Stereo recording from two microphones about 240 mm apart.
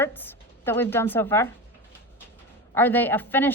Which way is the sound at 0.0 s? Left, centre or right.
Centre.